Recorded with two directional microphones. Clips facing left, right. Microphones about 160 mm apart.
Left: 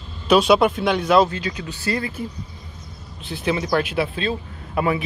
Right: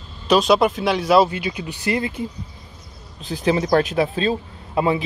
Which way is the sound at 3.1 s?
40° right (ahead or behind).